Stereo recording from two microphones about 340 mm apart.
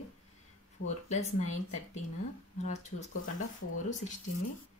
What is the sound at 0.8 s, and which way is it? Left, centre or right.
Speech, centre.